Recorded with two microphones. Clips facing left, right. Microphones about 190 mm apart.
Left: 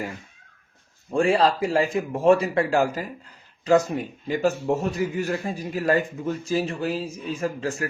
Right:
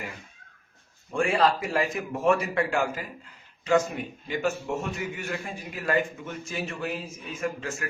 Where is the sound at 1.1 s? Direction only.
35° left (ahead or behind).